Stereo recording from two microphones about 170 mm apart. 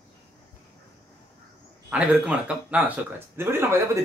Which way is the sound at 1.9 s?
5° right (ahead or behind).